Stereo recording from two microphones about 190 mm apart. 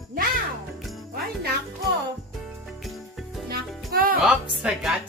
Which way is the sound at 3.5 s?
50° right (ahead or behind).